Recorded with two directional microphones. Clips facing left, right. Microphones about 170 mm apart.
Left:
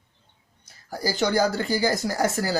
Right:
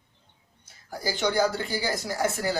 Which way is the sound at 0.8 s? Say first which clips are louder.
Left 3 dB; 35° left (ahead or behind).